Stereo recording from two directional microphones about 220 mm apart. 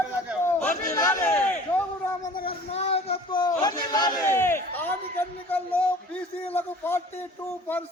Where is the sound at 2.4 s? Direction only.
30° left (ahead or behind); by 4.9 s 10° left (ahead or behind).